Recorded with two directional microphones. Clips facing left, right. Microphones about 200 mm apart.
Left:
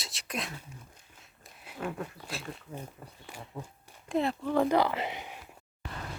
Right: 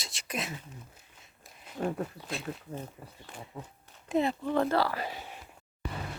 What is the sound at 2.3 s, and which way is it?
Speech, centre (ahead or behind).